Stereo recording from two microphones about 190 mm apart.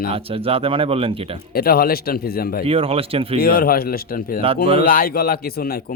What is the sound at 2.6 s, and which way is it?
Speech, 30° right (ahead or behind).